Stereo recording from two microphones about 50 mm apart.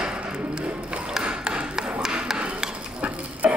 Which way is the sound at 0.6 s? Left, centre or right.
Right.